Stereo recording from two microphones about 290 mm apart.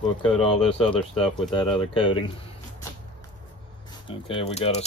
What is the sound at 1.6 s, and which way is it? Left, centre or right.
Speech, centre.